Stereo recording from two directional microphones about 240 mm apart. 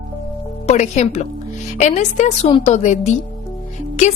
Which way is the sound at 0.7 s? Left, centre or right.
Left.